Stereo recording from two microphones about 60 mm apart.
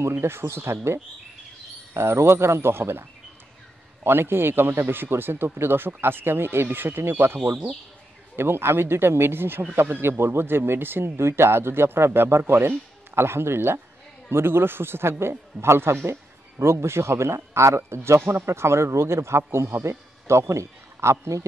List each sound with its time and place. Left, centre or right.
0.2 s a man's voice: right
2.0 s a man's voice: right
8.4 s a man's voice: right